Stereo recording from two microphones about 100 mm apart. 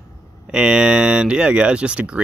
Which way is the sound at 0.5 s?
10° right (ahead or behind).